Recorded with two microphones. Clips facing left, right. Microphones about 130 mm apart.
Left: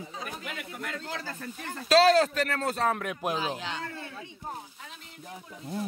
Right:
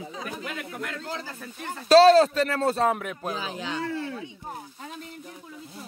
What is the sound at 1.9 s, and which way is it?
Speech, 30° right (ahead or behind).